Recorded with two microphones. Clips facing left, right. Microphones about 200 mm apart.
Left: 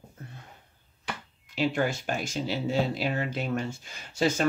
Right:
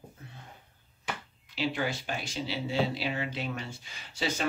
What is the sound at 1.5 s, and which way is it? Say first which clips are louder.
Speech: left 4 dB; 50° left (ahead or behind).